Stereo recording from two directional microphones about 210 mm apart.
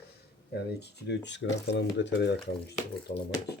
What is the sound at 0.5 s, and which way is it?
Speech, 55° left (ahead or behind).